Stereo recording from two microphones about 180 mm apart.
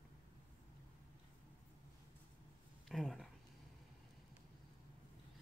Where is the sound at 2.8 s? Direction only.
Centre (ahead or behind).